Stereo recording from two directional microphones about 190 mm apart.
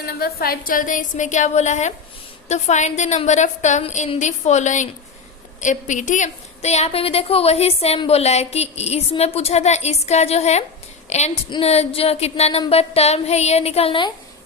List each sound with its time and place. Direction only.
0.0 s a woman's voice: 55° left (ahead or behind); by 14.1 s 30° left (ahead or behind)